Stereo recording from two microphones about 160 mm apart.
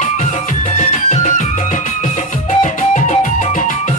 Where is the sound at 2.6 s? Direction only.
45° left (ahead or behind).